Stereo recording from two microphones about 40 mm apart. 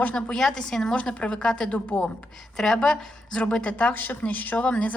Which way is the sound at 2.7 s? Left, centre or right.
Centre.